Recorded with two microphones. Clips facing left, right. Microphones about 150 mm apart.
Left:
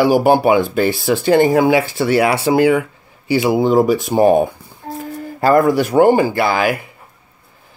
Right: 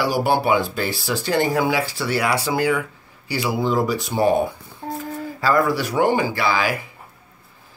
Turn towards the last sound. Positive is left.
turn(degrees=55)  # may be behind; listen again after turning